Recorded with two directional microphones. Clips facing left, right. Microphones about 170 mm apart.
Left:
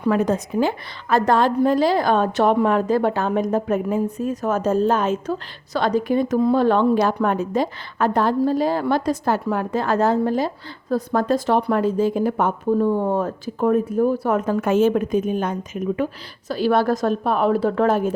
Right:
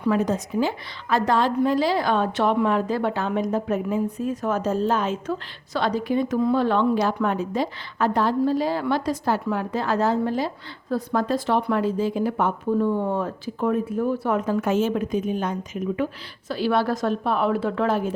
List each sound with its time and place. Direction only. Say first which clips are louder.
0.0 s a woman's voice: left 3 dB; 55° left (ahead or behind)